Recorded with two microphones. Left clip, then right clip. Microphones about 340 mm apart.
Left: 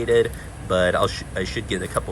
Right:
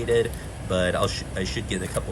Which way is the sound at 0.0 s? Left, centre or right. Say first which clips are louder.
Left 4 dB; centre.